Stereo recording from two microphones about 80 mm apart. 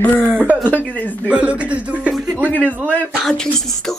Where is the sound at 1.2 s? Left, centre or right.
Centre.